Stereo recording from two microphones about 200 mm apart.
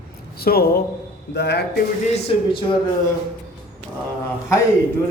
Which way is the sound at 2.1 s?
25° left (ahead or behind).